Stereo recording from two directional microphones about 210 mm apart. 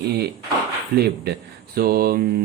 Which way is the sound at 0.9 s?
50° right (ahead or behind).